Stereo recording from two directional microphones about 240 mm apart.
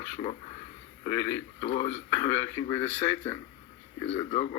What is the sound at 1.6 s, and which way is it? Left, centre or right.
Speech, left.